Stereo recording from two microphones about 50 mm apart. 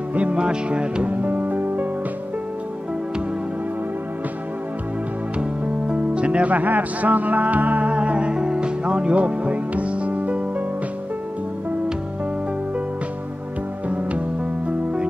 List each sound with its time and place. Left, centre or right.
0.1 s music: right
1.1 s music: right
5.4 s music: right
13.8 s music: right